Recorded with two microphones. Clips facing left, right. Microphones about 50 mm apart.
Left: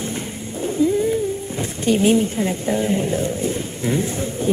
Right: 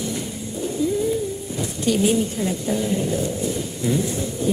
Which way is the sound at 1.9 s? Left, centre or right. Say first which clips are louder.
Left 3 dB; left.